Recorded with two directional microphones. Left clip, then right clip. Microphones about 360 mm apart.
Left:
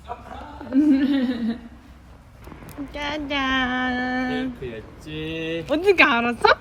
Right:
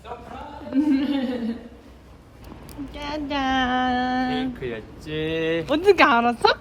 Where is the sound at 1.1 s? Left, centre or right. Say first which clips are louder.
Left 2 dB; left.